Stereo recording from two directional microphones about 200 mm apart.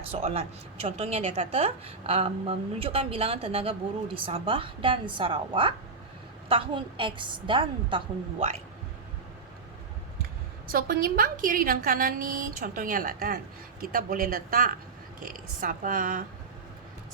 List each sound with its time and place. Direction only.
0.1 s a woman's voice: 30° right (ahead or behind)
10.7 s a woman's voice: 45° right (ahead or behind)